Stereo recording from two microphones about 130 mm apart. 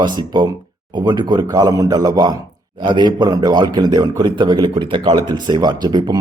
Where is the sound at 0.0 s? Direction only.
35° right (ahead or behind).